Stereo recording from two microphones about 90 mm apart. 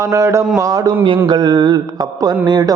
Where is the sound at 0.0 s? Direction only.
35° right (ahead or behind).